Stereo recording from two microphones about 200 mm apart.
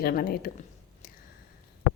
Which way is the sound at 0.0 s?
50° left (ahead or behind).